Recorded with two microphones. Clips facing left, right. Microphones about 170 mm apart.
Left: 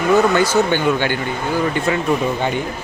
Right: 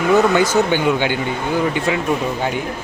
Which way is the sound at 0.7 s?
15° right (ahead or behind).